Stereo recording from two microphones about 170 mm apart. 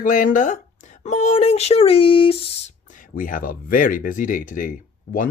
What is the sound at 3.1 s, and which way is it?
Speech, 55° left (ahead or behind).